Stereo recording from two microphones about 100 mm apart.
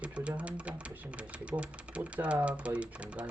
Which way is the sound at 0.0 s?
10° right (ahead or behind).